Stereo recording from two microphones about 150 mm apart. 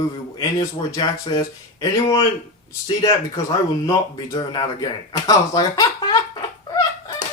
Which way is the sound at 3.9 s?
25° left (ahead or behind).